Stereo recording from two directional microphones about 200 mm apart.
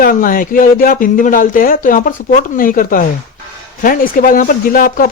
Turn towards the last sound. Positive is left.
turn(degrees=45)  # may be behind; listen again after turning